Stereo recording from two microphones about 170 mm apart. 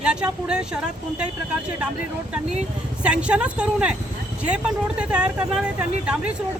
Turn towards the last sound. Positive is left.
turn(degrees=-5)  # may be behind; listen again after turning